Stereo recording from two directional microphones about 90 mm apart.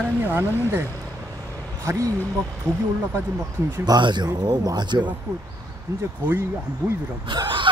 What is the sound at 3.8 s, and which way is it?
Speech, 55° right (ahead or behind).